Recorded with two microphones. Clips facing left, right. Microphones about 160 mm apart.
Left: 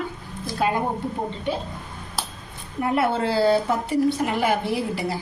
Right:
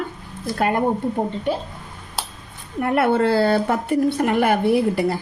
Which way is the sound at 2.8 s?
60° right (ahead or behind).